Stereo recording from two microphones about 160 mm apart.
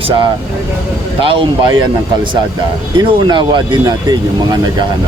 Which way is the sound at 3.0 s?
30° right (ahead or behind).